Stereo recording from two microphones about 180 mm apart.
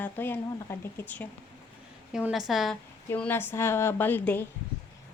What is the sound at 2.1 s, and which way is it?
Speech, centre (ahead or behind).